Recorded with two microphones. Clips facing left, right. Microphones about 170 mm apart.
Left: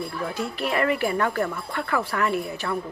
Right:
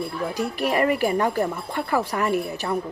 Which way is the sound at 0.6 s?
40° right (ahead or behind).